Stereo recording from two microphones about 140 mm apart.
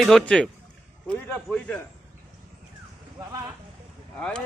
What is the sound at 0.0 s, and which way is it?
A man's voice, centre (ahead or behind).